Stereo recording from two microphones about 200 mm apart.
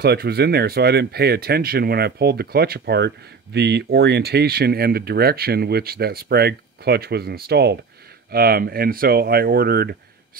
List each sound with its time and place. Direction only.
0.0 s speech: 50° right (ahead or behind)